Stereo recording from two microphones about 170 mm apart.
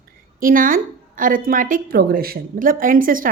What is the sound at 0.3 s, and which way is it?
A woman's voice, 55° right (ahead or behind).